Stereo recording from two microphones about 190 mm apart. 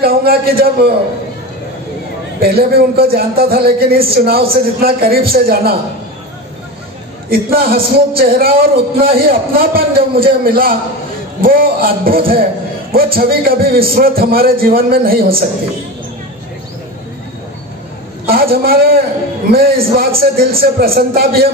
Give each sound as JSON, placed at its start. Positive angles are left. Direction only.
{"t": 0.0, "sound": "a man's voice", "side_deg": -50}
{"t": 2.4, "sound": "a man's voice", "side_deg": -55}
{"t": 7.5, "sound": "a man's voice", "side_deg": -50}
{"t": 18.2, "sound": "a man's voice", "side_deg": -50}